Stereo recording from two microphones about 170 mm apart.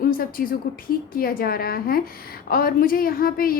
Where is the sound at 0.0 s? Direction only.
60° left (ahead or behind).